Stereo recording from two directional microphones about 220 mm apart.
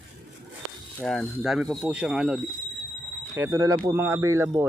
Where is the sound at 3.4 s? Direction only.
15° right (ahead or behind).